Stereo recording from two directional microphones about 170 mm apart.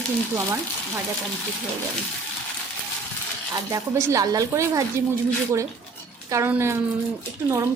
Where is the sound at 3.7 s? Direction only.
20° right (ahead or behind).